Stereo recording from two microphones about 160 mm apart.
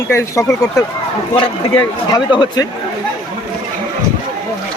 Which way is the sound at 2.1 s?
25° left (ahead or behind).